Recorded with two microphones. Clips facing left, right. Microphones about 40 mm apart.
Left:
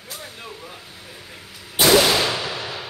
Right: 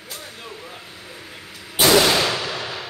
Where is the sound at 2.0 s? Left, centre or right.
Centre.